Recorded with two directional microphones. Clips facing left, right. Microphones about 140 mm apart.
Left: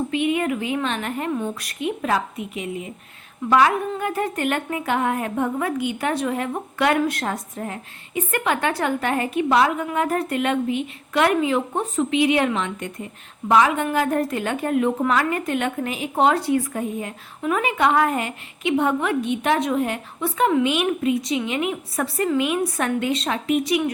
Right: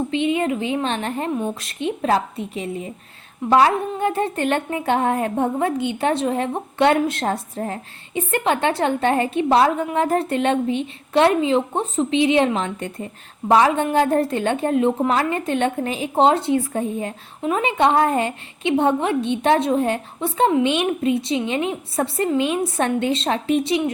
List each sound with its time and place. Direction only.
0.1 s a woman's voice: 25° right (ahead or behind)